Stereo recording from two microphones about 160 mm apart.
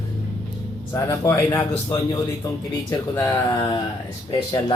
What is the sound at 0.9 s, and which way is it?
A man's voice, 20° left (ahead or behind).